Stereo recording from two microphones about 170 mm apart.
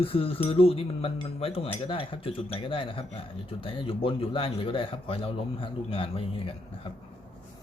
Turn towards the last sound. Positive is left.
turn(degrees=30)  # may be behind; listen again after turning